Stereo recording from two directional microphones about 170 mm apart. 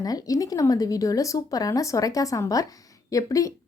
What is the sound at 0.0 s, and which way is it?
Speech, 20° left (ahead or behind).